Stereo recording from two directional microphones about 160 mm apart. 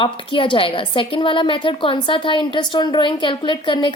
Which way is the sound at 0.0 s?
30° left (ahead or behind).